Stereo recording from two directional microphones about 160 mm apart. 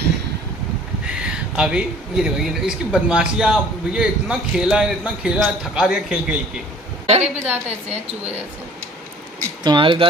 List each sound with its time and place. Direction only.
1.0 s speech: 5° right (ahead or behind)
7.1 s a woman's voice: 40° right (ahead or behind)
9.6 s speech: 30° right (ahead or behind)